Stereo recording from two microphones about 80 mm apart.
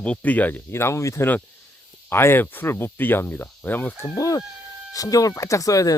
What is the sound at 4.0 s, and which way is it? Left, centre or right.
Speech, left.